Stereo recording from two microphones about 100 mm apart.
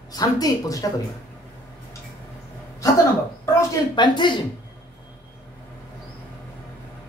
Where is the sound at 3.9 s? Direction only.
50° left (ahead or behind).